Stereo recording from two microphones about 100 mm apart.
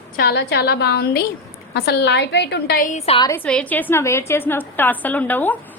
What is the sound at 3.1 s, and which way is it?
Speech, 85° left.